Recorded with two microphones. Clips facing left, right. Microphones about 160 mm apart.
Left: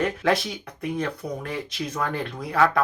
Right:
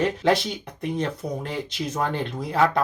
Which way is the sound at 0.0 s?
20° right (ahead or behind).